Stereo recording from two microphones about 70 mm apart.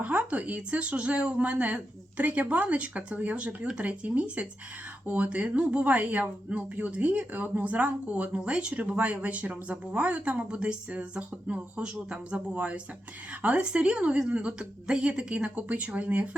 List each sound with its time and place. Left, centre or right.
0.0 s speech: right